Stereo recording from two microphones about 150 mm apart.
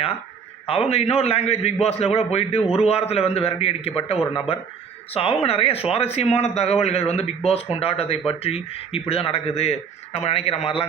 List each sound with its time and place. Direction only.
0.7 s a man's voice: 45° left (ahead or behind)